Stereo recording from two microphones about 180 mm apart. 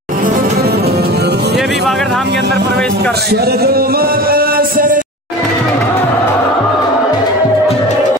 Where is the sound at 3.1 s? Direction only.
65° right (ahead or behind).